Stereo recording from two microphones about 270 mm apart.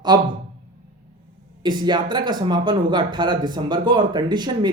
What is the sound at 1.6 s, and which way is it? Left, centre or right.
Speech, centre.